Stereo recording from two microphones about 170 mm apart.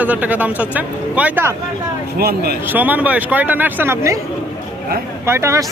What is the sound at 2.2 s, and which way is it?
Speech, 65° right (ahead or behind).